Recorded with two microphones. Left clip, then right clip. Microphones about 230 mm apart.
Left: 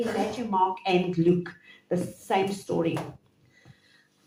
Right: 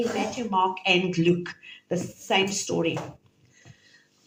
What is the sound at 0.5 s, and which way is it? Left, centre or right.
Speech, right.